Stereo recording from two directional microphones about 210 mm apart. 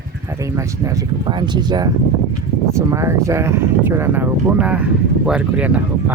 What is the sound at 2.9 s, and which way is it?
Speech, 15° right (ahead or behind).